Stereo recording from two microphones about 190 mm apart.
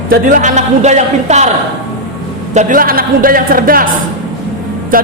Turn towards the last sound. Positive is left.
turn(degrees=-45)  # may be behind; listen again after turning